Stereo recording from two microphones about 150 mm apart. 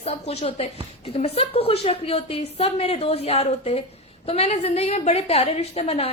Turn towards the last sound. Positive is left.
turn(degrees=40)  # may be behind; listen again after turning